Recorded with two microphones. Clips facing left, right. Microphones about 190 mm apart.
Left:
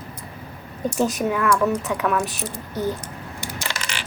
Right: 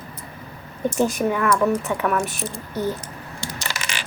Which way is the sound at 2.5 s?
20° right (ahead or behind).